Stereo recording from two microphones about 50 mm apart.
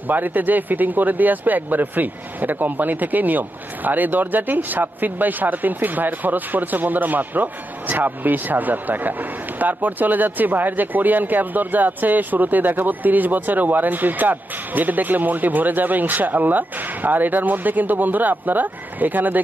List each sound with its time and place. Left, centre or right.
0.1 s speech: right